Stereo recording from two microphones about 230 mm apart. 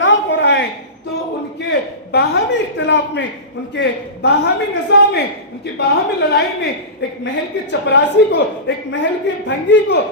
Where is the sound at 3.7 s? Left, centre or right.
Left.